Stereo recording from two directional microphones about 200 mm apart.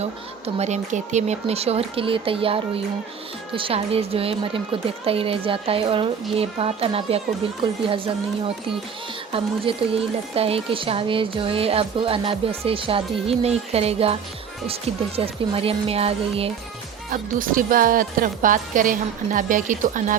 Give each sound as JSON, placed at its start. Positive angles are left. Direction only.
{"t": 0.0, "sound": "a woman's voice", "side_deg": -30}
{"t": 9.3, "sound": "a woman's voice", "side_deg": -30}
{"t": 17.1, "sound": "a woman's voice", "side_deg": -45}